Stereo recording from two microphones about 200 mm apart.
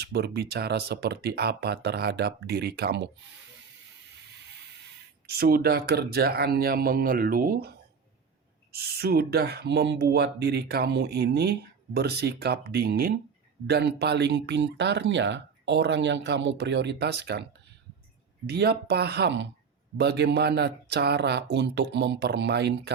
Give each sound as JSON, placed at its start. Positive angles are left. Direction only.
{"t": 0.0, "sound": "speech", "side_deg": -55}
{"t": 5.4, "sound": "speech", "side_deg": -50}
{"t": 8.7, "sound": "speech", "side_deg": -50}
{"t": 18.4, "sound": "speech", "side_deg": -55}